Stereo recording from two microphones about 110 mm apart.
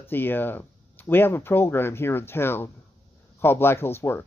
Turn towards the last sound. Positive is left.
turn(degrees=20)  # may be behind; listen again after turning